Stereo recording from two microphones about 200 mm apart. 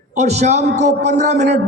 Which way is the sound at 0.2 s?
35° right (ahead or behind).